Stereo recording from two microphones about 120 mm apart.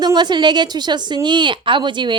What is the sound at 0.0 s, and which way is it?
Speech, 35° right (ahead or behind).